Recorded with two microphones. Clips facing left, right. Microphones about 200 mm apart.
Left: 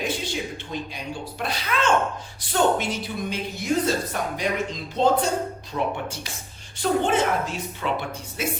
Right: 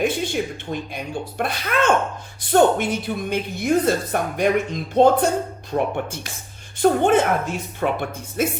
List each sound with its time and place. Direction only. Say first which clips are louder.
0.0 s a woman's voice: right 6 dB; 55° right (ahead or behind)